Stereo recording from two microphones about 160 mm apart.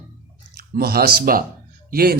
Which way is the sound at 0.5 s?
70° right (ahead or behind).